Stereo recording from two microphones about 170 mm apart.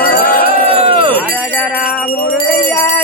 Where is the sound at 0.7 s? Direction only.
35° right (ahead or behind).